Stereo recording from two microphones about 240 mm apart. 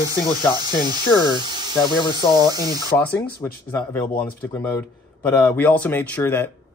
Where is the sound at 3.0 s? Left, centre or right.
Centre.